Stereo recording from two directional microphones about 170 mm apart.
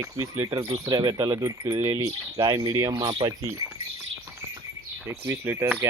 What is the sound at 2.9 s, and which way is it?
Speech, 30° right (ahead or behind).